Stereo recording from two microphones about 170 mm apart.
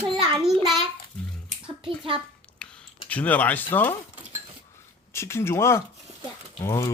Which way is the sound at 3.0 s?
10° left (ahead or behind).